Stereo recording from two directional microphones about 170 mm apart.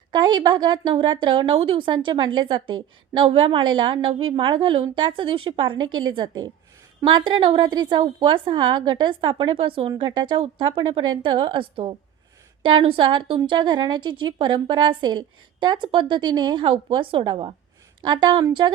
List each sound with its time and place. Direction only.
0.1 s a woman's voice: 25° right (ahead or behind)
12.6 s a woman's voice: 30° right (ahead or behind)